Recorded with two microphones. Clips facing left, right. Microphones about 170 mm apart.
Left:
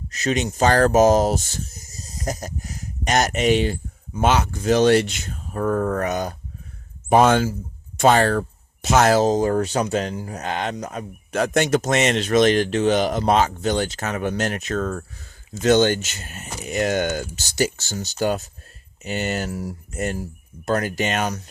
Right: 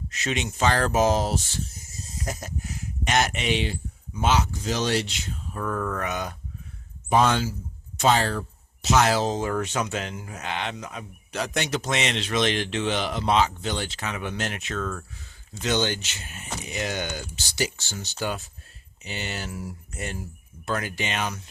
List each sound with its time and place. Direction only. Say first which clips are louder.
0.1 s speech: left 7 dB; 40° left (ahead or behind)
7.1 s speech: left 6 dB; 55° left (ahead or behind)